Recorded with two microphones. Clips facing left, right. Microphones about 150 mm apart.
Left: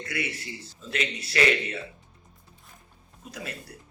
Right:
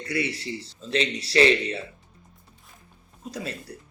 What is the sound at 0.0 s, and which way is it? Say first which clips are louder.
Speech: right 5 dB; 30° right (ahead or behind).